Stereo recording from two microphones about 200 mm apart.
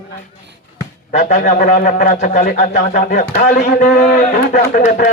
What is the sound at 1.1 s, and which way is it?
A man's voice, 40° left (ahead or behind).